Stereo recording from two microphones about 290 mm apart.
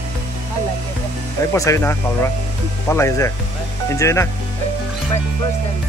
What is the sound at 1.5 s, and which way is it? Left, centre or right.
Speech, centre.